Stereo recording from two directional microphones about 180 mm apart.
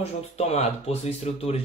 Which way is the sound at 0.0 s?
35° left (ahead or behind).